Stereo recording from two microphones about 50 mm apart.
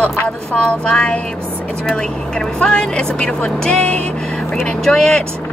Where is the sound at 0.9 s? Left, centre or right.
Left.